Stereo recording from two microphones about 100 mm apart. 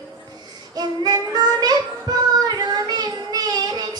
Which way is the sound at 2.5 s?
40° right (ahead or behind).